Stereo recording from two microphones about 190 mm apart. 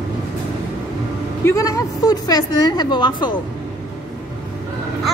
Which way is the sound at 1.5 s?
20° left (ahead or behind).